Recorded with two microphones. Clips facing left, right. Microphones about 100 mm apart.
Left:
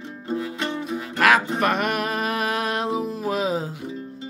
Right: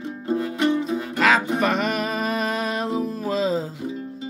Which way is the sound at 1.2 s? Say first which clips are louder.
Left 1 dB; 5° left (ahead or behind).